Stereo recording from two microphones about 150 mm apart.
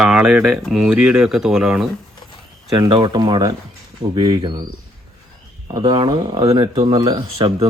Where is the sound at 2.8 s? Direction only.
30° right (ahead or behind).